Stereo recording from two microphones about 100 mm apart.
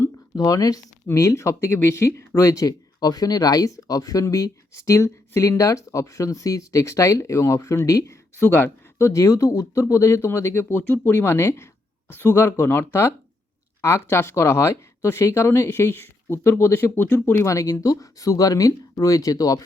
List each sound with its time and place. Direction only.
0.3 s speech: 40° left (ahead or behind); by 17.4 s 20° left (ahead or behind)
17.4 s speech: 30° left (ahead or behind)